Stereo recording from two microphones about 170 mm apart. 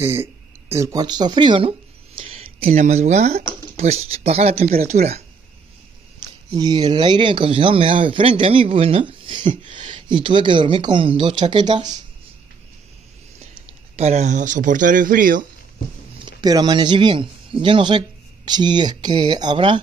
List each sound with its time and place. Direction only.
0.0 s speech: 15° right (ahead or behind); by 5.2 s 40° right (ahead or behind)
6.5 s speech: 25° right (ahead or behind)
13.9 s speech: 40° right (ahead or behind)
16.3 s speech: 25° right (ahead or behind)